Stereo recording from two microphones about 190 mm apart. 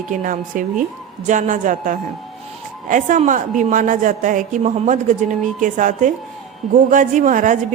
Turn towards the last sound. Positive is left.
turn(degrees=-40)  # may be behind; listen again after turning